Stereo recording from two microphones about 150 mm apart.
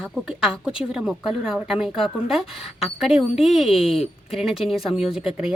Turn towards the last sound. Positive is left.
turn(degrees=-5)  # may be behind; listen again after turning